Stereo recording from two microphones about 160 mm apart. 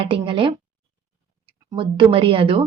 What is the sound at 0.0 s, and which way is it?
Speech, 35° right (ahead or behind).